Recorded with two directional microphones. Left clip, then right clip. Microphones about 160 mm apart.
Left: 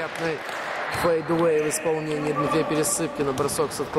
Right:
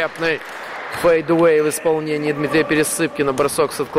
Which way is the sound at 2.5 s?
10° right (ahead or behind).